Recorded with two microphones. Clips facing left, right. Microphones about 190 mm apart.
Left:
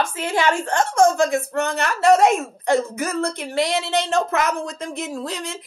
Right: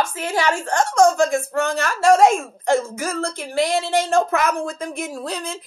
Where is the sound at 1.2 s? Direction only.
20° left (ahead or behind).